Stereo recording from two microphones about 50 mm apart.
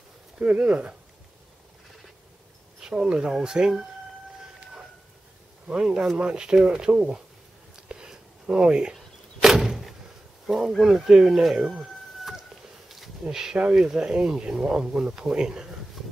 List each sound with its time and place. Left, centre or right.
0.4 s speech: right
2.8 s speech: centre
5.7 s speech: centre
7.9 s a sound: centre
8.9 s a sound: centre
10.4 s speech: centre
10.8 s speech: centre
11.7 s chicken: centre
12.8 s a sound: centre
13.7 s speech: centre